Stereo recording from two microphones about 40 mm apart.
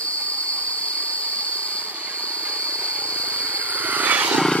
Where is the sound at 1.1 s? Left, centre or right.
Right.